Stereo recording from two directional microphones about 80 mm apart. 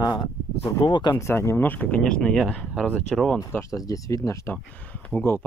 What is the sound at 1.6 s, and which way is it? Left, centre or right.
Speech, left.